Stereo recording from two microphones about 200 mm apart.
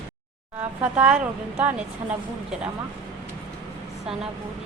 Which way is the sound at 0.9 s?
5° right (ahead or behind).